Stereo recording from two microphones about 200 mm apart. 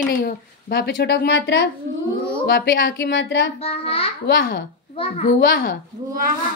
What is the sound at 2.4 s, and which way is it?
Speech, 45° left (ahead or behind).